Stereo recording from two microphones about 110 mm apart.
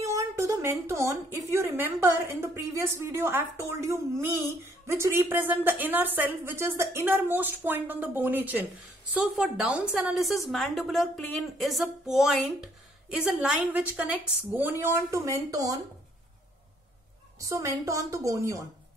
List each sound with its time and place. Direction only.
0.0 s a sound: 25° right (ahead or behind)
1.5 s a woman's voice: 20° right (ahead or behind)
10.1 s a woman's voice: centre (ahead or behind)
14.6 s a woman's voice: 20° right (ahead or behind)
17.4 s a woman's voice: 30° right (ahead or behind)